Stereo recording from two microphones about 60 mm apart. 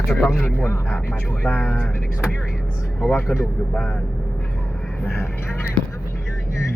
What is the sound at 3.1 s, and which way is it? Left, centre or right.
Speech, left.